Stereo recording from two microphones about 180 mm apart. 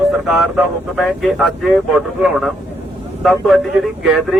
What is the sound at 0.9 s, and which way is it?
Speech, centre (ahead or behind).